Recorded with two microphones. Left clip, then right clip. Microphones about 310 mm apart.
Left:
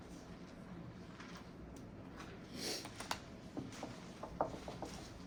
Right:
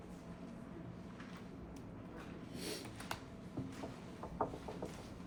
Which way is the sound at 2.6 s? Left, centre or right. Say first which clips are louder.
Left 3 dB; centre.